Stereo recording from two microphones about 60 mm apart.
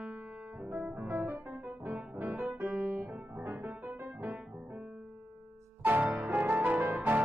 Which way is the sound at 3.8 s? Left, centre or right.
Right.